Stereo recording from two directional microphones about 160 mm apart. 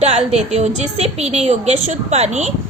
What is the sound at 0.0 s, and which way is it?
A woman's voice, 40° right (ahead or behind).